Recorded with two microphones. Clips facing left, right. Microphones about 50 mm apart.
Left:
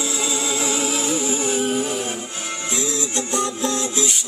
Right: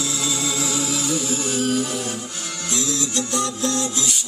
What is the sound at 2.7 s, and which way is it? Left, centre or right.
Music, left.